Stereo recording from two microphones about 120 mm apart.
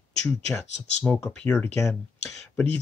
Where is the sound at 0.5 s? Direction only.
20° left (ahead or behind).